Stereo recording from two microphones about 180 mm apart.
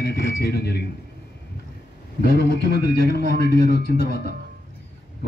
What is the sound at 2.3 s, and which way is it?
A woman's voice, 60° left (ahead or behind).